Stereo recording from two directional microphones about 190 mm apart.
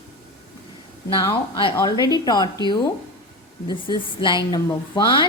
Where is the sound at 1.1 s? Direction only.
25° left (ahead or behind).